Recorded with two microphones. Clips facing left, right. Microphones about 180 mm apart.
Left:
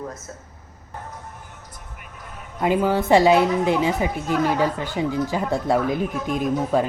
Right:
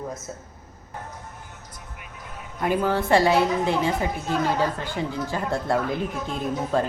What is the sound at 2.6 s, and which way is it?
Speech, 15° left (ahead or behind).